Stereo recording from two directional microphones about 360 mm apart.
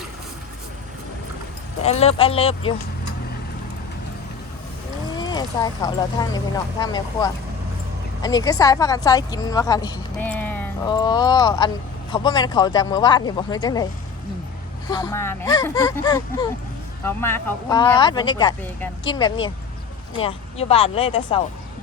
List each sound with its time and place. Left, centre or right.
1.8 s speech: centre
5.1 s speech: centre
14.8 s speech: centre